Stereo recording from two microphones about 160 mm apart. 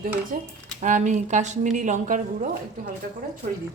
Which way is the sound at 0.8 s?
50° right (ahead or behind).